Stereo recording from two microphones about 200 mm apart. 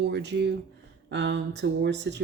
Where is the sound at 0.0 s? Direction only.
60° right (ahead or behind).